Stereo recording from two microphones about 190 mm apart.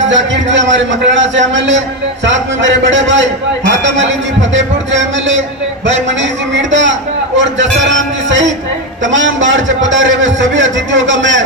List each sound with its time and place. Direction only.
0.0 s a man's voice: 75° right (ahead or behind)
6.6 s a man's voice: 75° right (ahead or behind)